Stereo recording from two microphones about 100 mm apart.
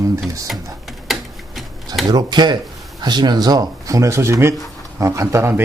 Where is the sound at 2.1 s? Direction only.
45° right (ahead or behind).